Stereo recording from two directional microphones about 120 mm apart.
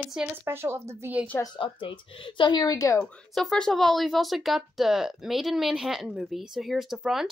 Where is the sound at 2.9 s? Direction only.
10° left (ahead or behind).